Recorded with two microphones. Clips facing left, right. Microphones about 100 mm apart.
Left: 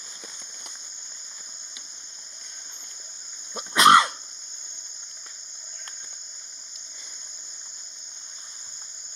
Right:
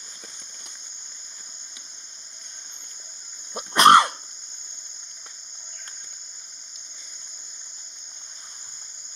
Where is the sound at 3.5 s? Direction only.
55° right (ahead or behind).